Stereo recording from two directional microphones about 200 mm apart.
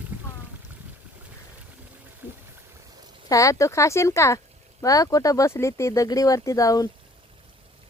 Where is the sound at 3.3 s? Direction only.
15° left (ahead or behind).